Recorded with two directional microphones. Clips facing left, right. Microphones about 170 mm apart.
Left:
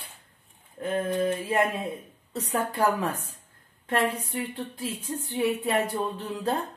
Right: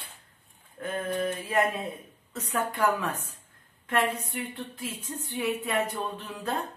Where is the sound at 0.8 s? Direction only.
35° left (ahead or behind).